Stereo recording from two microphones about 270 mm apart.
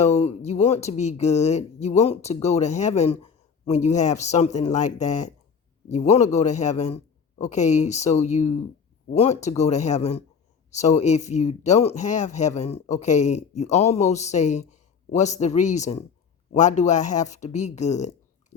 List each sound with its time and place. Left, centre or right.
0.0 s speech: left